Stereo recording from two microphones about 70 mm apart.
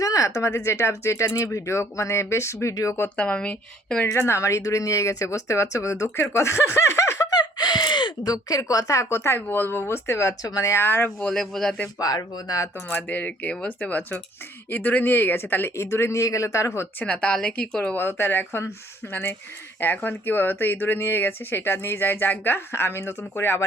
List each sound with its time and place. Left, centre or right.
0.0 s speech: left
3.2 s a woman's voice: centre
4.0 s speech: left
7.3 s a sound: left
9.0 s speech: left
10.8 s speech: left
11.2 s a woman's voice: centre
11.9 s speech: left
12.9 s speech: left
17.0 s a woman's voice: centre
17.9 s speech: left